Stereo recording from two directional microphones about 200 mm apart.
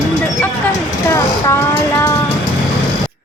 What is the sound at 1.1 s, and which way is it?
Speech, 10° left (ahead or behind).